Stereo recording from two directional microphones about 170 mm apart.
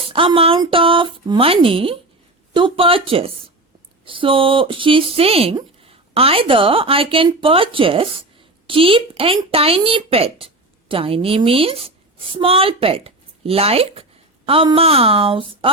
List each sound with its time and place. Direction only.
0.0 s a woman's voice: 30° right (ahead or behind)